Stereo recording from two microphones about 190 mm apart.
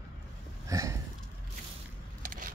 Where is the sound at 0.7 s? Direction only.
15° right (ahead or behind).